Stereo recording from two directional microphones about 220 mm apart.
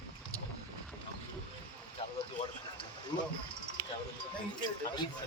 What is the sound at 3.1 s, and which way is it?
Speech, 20° left (ahead or behind).